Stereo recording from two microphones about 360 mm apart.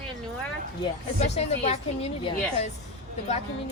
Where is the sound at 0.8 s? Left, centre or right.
Centre.